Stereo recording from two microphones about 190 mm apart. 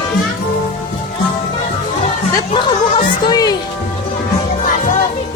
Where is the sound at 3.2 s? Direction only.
20° left (ahead or behind).